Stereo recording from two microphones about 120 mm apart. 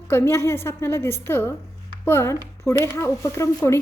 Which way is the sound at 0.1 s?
20° left (ahead or behind).